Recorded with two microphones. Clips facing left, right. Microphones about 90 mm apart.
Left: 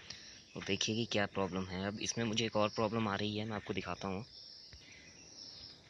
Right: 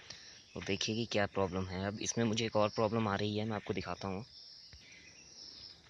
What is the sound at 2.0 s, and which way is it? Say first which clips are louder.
Speech: right 7 dB; 25° right (ahead or behind).